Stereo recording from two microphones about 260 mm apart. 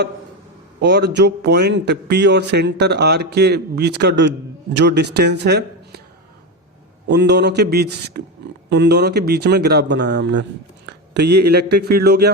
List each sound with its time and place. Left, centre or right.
0.8 s a man's voice: right
7.1 s a man's voice: right